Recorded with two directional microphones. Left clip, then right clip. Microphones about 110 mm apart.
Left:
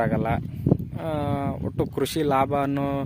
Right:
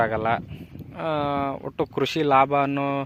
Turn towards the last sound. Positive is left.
turn(degrees=50)  # may be behind; listen again after turning